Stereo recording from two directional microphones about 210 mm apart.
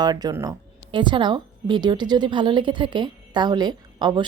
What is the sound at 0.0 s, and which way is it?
Speech, 20° right (ahead or behind).